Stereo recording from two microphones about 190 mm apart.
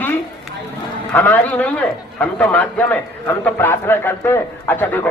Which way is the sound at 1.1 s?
10° left (ahead or behind).